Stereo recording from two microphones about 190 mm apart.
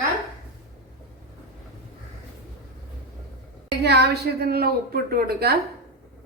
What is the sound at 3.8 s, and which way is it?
A woman's voice, 60° right (ahead or behind).